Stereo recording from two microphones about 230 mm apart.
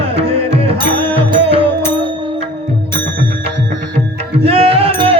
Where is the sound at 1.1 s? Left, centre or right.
Right.